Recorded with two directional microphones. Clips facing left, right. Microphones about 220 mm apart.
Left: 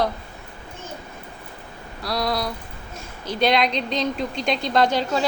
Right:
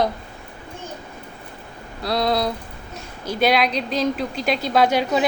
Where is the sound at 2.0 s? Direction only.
25° right (ahead or behind).